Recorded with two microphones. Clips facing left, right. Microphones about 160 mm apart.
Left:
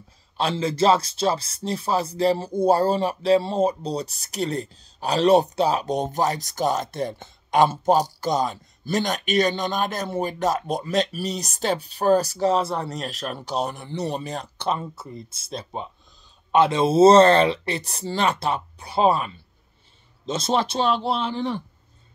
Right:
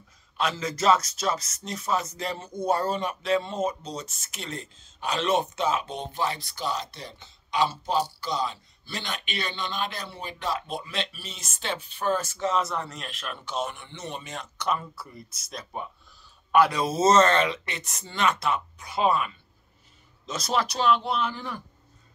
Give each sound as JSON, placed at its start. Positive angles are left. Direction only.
{"t": 0.4, "sound": "speech", "side_deg": 30}